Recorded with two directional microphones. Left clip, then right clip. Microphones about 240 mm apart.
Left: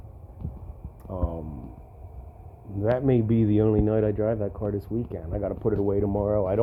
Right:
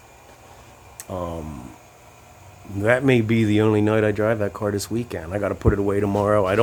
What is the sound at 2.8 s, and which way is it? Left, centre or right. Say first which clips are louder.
Speech: right 5 dB; centre.